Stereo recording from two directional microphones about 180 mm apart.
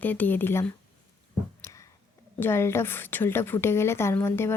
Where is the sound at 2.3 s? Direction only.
10° left (ahead or behind).